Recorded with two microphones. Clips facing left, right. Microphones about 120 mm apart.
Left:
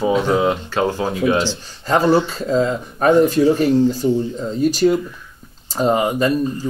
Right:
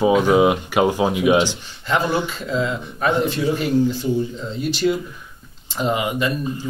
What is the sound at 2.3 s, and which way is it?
Speech, 40° left (ahead or behind).